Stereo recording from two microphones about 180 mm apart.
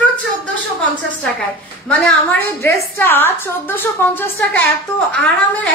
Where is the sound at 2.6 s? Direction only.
15° left (ahead or behind).